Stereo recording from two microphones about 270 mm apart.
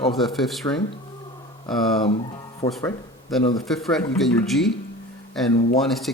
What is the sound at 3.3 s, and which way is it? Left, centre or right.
Speech, centre.